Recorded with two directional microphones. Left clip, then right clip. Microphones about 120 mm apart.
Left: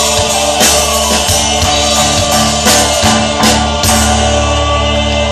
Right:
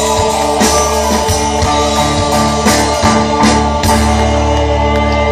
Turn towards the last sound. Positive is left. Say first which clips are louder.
# even
turn(degrees=-45)  # may be behind; listen again after turning